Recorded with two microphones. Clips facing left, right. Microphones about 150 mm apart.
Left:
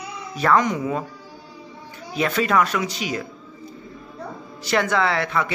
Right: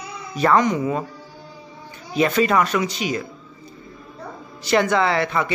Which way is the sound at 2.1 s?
Centre (ahead or behind).